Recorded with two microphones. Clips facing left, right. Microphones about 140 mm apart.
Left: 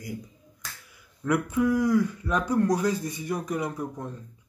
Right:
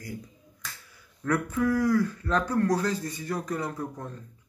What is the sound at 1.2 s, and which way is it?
Speech, 15° left (ahead or behind).